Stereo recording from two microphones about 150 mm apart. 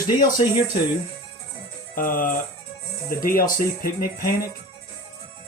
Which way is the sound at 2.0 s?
65° left (ahead or behind).